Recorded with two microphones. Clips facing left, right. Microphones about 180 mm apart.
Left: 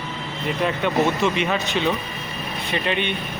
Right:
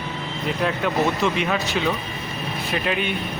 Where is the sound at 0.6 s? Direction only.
Centre (ahead or behind).